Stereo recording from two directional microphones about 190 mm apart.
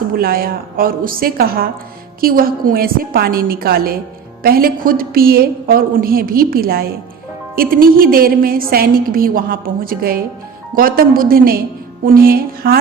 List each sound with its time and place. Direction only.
0.2 s a woman's voice: 50° right (ahead or behind)